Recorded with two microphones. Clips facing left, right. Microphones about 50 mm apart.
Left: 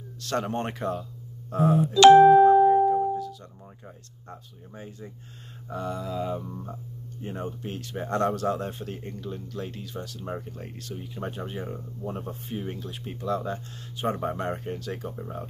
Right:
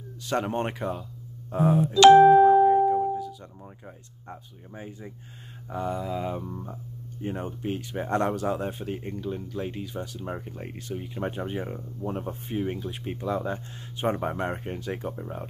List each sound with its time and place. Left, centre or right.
0.2 s speech: centre
2.6 s music: centre
4.3 s speech: centre
15.1 s speech: centre